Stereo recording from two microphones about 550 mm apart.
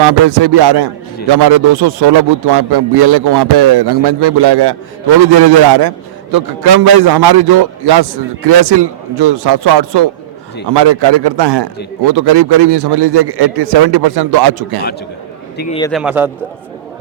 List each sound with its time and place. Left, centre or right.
0.4 s a man's voice: right
15.5 s a man's voice: centre